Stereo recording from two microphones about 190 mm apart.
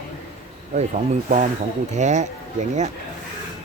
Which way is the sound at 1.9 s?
40° right (ahead or behind).